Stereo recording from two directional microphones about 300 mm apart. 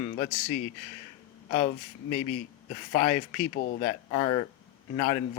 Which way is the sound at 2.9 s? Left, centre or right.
Left.